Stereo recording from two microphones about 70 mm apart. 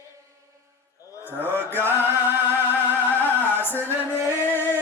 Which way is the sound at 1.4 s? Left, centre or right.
Right.